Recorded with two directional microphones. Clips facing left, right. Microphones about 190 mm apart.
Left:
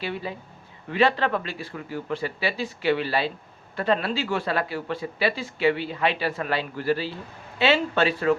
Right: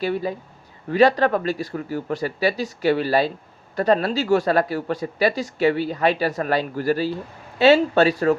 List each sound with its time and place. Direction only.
0.0 s speech: 40° right (ahead or behind)